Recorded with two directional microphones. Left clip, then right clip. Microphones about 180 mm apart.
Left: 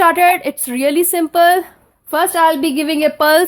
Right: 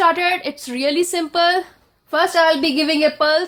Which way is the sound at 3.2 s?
55° left (ahead or behind).